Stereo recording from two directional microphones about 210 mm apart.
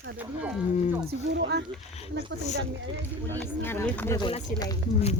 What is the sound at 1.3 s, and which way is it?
Speech, 55° right (ahead or behind).